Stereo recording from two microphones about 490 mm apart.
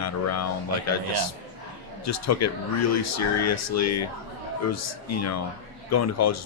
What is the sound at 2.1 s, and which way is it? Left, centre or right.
A man's voice, left.